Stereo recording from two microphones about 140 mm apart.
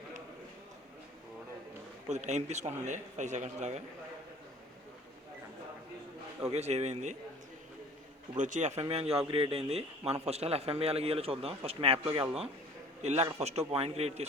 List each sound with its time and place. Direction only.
2.0 s speech: 55° right (ahead or behind)
6.5 s speech: 50° right (ahead or behind)
8.4 s a man's voice: 65° right (ahead or behind)